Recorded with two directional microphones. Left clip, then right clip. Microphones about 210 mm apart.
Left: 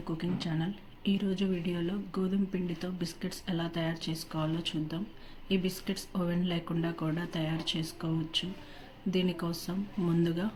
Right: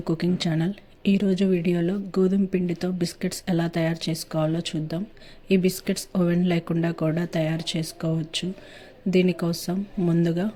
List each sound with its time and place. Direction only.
0.0 s speech: 40° right (ahead or behind)